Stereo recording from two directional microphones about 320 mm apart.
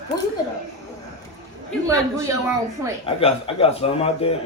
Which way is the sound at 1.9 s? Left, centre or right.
Centre.